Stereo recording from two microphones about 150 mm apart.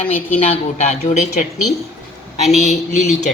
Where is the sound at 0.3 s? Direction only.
45° left (ahead or behind).